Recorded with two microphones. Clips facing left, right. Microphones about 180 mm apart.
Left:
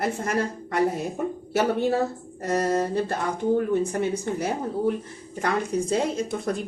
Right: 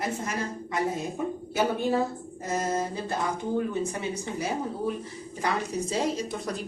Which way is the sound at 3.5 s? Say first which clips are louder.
Left 5 dB; 55° left (ahead or behind).